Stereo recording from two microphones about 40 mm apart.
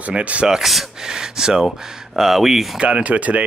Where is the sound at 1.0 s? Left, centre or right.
Centre.